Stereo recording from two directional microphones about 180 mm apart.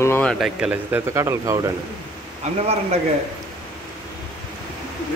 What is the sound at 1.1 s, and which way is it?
Speech, 15° right (ahead or behind).